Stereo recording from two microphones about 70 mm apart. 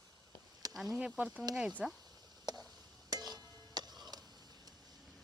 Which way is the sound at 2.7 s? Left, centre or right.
Right.